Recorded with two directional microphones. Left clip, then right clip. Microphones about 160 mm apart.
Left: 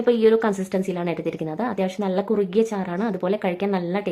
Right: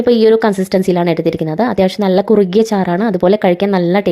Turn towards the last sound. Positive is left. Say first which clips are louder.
# right 11 dB
turn(degrees=-40)  # may be behind; listen again after turning